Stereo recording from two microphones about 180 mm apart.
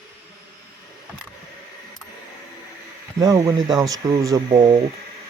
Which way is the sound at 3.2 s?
20° right (ahead or behind).